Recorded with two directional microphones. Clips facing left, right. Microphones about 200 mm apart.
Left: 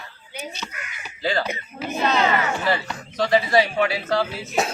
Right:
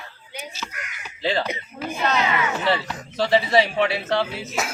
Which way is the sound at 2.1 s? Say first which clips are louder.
Left 2 dB; 35° left (ahead or behind).